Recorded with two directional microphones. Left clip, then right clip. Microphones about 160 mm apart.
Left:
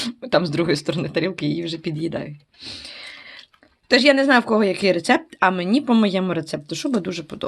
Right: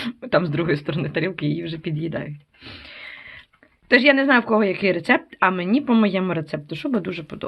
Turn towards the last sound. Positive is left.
turn(degrees=15)  # may be behind; listen again after turning